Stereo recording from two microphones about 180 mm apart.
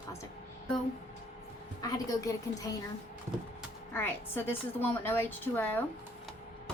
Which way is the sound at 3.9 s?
10° left (ahead or behind).